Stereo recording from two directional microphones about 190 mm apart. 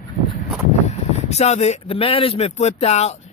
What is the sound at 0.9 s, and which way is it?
Speech, 35° left (ahead or behind).